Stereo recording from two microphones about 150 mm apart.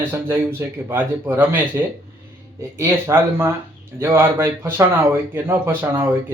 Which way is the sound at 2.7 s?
15° right (ahead or behind).